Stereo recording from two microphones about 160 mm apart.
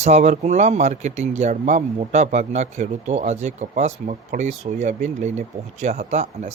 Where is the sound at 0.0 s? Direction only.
45° right (ahead or behind).